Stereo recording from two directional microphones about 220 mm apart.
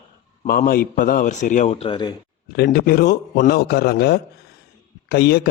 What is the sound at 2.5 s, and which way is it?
A man's voice, 45° left (ahead or behind).